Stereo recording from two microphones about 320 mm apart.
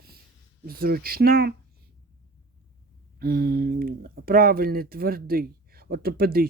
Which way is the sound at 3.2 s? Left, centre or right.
Right.